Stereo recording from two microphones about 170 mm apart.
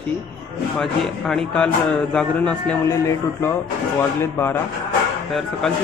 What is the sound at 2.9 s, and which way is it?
Speech, 20° left (ahead or behind).